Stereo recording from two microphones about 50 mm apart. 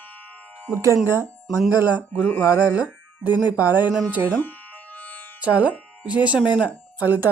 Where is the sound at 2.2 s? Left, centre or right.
Left.